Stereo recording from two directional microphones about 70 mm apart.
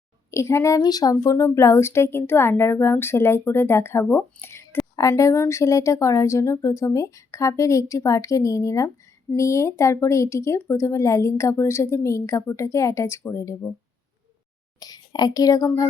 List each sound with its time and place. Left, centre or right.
0.3 s speech: left
0.8 s speech: left
1.1 s a woman's voice: left
4.9 s speech: left
14.8 s a child's voice: left